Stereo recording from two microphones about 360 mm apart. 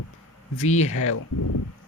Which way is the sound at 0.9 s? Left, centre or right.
Left.